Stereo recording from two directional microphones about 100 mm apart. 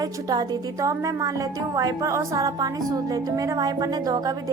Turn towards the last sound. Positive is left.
turn(degrees=-40)  # may be behind; listen again after turning